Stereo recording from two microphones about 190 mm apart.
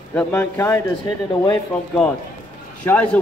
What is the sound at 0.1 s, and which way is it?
Speech, 10° left (ahead or behind).